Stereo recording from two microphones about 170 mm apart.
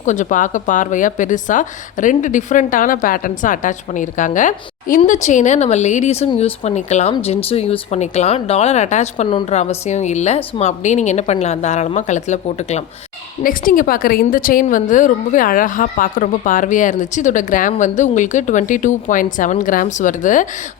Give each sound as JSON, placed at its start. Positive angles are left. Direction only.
{"t": 0.0, "sound": "speech", "side_deg": 45}
{"t": 13.4, "sound": "speech", "side_deg": 55}